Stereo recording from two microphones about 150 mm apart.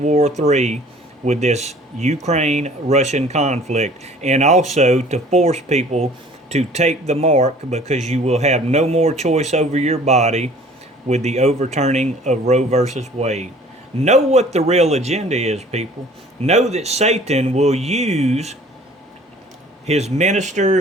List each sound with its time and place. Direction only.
0.0 s speech: 45° right (ahead or behind)
19.9 s speech: 45° right (ahead or behind)